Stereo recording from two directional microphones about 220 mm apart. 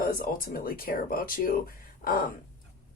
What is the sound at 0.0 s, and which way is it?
Speech, 40° left (ahead or behind).